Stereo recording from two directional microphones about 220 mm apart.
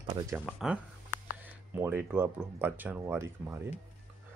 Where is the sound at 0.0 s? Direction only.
20° right (ahead or behind).